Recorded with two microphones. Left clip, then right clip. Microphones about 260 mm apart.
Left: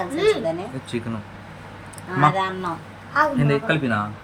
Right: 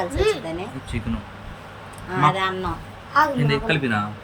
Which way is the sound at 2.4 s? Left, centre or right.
Centre.